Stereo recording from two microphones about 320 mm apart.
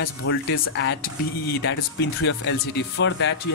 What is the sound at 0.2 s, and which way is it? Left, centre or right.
Speech, left.